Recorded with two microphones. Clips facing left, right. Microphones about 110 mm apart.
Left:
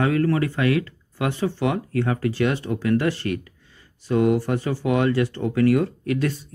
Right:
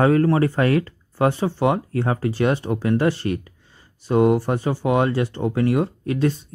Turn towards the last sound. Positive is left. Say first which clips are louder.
# right 2 dB
turn(degrees=-25)  # may be behind; listen again after turning